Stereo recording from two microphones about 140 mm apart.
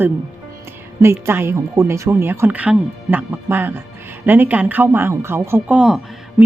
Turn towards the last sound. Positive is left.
turn(degrees=-5)  # may be behind; listen again after turning